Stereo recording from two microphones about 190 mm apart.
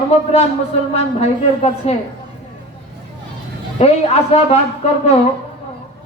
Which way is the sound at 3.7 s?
35° left (ahead or behind).